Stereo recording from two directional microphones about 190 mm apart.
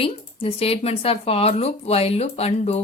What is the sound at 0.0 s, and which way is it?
Speech, 30° left (ahead or behind).